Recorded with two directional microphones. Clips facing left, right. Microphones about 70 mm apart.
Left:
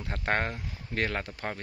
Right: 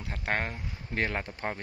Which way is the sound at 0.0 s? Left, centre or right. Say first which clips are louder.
Left 2 dB; centre.